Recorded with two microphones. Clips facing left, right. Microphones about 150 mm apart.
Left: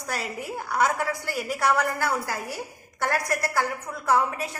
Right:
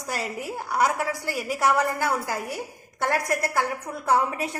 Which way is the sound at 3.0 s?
20° right (ahead or behind).